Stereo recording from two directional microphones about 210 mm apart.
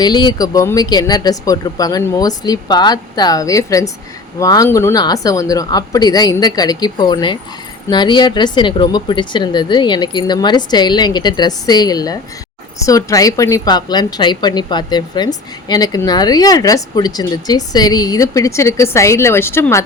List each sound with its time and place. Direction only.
0.0 s a woman's voice: 20° left (ahead or behind)